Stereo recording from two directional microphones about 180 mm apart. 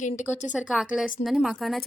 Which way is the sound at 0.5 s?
5° right (ahead or behind).